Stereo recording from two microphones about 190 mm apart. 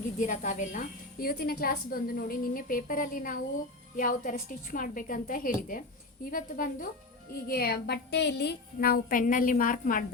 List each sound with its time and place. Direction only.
0.2 s a woman's voice: 40° left (ahead or behind)
1.2 s a woman's voice: 50° left (ahead or behind)